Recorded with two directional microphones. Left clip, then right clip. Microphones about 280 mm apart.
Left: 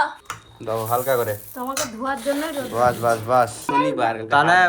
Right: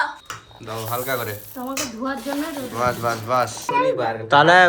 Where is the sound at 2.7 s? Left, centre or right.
Centre.